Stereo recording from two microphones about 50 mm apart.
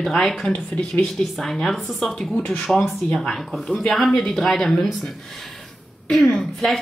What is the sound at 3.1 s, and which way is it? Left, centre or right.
A woman's voice, centre.